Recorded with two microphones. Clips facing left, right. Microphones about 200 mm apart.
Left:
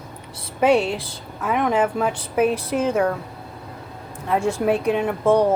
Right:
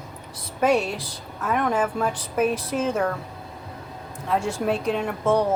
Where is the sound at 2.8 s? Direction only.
10° left (ahead or behind).